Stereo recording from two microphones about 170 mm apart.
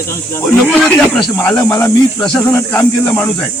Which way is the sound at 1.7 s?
15° left (ahead or behind).